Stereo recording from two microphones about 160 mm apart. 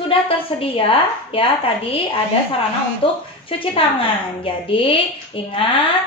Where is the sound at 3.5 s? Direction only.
35° left (ahead or behind).